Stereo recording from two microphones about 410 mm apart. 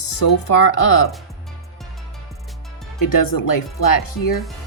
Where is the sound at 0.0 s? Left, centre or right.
Left.